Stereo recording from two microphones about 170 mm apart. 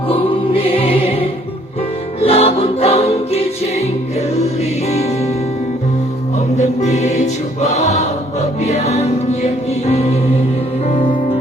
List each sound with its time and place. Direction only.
0.1 s music: 35° left (ahead or behind)
2.2 s music: 35° left (ahead or behind)
4.9 s music: 40° left (ahead or behind)
6.6 s music: 40° left (ahead or behind)
7.6 s choir: 40° left (ahead or behind)
8.6 s music: 40° left (ahead or behind)